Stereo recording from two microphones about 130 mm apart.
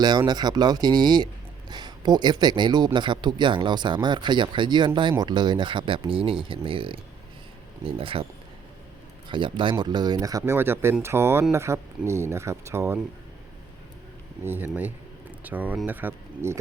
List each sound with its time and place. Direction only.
0.0 s speech: 35° right (ahead or behind)
9.3 s speech: 40° right (ahead or behind); by 13.0 s 20° right (ahead or behind)
14.4 s speech: 15° right (ahead or behind)